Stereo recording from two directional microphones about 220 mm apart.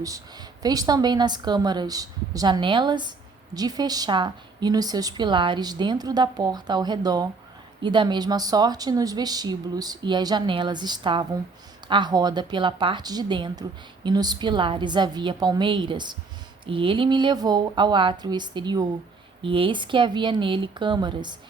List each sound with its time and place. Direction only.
0.6 s a woman's voice: 15° right (ahead or behind)